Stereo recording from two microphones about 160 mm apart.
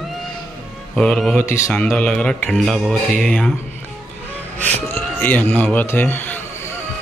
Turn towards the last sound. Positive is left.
turn(degrees=10)  # may be behind; listen again after turning